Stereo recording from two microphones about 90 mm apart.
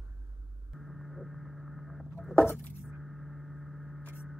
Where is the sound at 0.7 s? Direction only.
Centre (ahead or behind).